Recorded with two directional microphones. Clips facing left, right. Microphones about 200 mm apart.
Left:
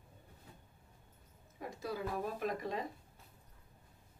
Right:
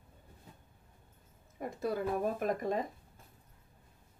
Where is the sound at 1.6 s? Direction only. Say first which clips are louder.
Right 6 dB; 55° right (ahead or behind).